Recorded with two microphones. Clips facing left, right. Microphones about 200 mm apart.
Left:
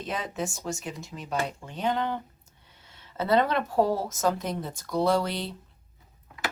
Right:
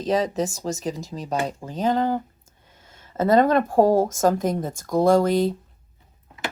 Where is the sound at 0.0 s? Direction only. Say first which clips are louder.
Right 10 dB; 40° right (ahead or behind).